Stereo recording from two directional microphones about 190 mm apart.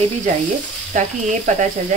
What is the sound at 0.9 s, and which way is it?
Sizzle, 40° right (ahead or behind).